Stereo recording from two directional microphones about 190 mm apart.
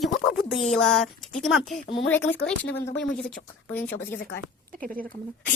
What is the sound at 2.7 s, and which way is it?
Speech, 5° left (ahead or behind).